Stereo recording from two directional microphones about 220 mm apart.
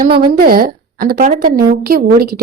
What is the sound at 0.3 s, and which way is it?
Speech, 45° right (ahead or behind).